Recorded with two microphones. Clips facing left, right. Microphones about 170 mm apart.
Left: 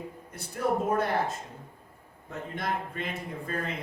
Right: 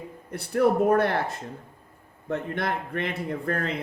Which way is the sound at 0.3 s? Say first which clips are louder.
Right 7 dB; 65° right (ahead or behind).